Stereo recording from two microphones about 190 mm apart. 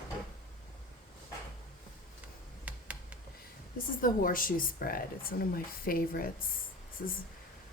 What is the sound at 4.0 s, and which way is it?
Speech, 45° left (ahead or behind).